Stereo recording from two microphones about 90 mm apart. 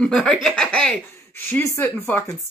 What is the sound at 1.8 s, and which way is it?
Speech, 25° left (ahead or behind).